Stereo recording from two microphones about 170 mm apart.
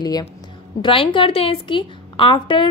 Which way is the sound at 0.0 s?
25° left (ahead or behind).